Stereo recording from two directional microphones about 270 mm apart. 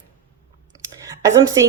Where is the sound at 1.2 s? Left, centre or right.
Centre.